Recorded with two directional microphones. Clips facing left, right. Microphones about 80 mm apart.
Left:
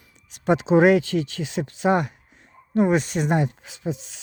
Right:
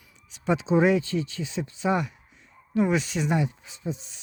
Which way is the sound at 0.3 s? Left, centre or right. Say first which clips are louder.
Left 5 dB; left.